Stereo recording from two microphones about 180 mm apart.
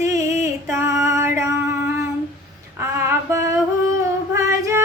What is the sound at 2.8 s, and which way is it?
Child singing, 15° right (ahead or behind).